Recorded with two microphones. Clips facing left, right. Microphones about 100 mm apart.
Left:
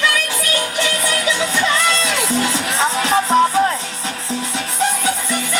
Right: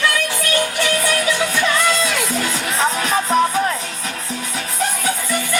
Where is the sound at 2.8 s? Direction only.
30° left (ahead or behind).